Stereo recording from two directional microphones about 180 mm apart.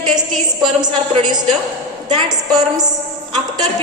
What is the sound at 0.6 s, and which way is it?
A woman's voice, 25° right (ahead or behind).